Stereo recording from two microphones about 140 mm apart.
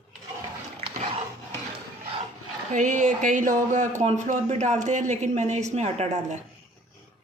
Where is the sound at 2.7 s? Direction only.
65° right (ahead or behind).